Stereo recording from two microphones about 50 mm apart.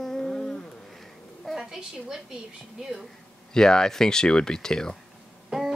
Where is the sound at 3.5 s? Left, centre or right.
Centre.